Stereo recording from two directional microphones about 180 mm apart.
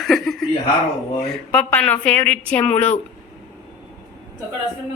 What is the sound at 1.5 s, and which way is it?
A woman's voice, 10° left (ahead or behind).